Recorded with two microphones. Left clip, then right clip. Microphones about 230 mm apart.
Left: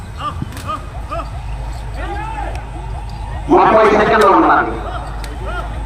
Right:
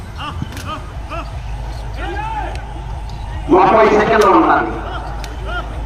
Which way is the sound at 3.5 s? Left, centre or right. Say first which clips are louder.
Even; centre.